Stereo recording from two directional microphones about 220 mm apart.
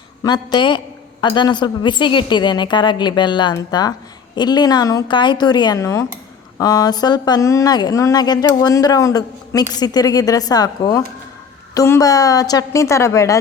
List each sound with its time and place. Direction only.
0.2 s a woman's voice: 20° left (ahead or behind)